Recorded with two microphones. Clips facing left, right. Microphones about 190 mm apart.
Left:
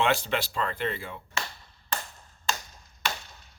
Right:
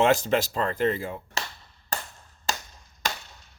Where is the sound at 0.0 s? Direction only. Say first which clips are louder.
Right 5 dB; 40° right (ahead or behind).